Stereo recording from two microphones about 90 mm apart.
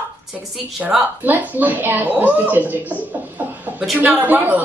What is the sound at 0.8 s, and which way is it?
Speech, 10° right (ahead or behind).